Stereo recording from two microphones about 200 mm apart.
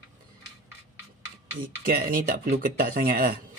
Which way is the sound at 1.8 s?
50° right (ahead or behind).